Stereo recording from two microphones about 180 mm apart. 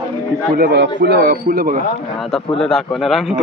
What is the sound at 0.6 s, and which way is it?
A man's voice, 65° right (ahead or behind).